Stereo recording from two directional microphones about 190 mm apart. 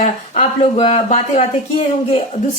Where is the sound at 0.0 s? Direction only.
30° left (ahead or behind).